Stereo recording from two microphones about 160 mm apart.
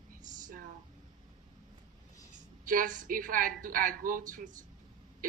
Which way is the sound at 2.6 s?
60° right (ahead or behind).